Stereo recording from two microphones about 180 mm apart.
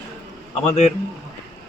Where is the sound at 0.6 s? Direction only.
40° left (ahead or behind).